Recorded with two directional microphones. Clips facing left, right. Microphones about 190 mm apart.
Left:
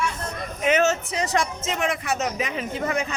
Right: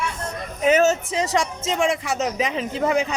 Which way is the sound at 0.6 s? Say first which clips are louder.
Right 3 dB; 35° right (ahead or behind).